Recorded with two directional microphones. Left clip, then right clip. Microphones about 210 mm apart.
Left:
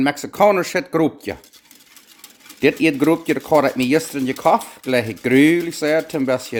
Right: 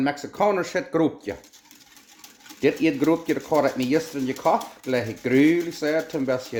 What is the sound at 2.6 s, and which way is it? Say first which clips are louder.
Speech: left 5 dB; 50° left (ahead or behind).